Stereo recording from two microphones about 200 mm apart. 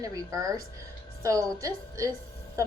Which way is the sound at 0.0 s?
15° right (ahead or behind).